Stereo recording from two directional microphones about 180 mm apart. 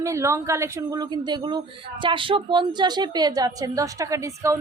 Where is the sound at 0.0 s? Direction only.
15° right (ahead or behind).